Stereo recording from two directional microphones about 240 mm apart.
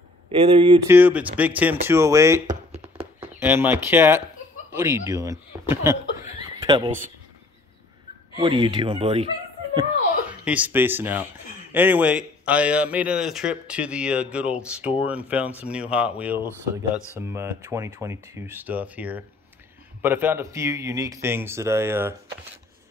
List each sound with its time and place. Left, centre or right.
0.3 s speech: right
0.8 s speech: centre
2.4 s a sound: right
3.2 s speech: centre
8.4 s speech: centre
10.4 s a man's voice: centre